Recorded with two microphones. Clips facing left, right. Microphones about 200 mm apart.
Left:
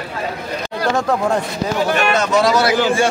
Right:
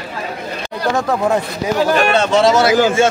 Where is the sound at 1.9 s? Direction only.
40° right (ahead or behind).